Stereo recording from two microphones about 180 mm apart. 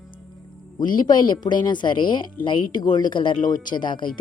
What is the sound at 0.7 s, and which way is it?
Speech, 25° left (ahead or behind).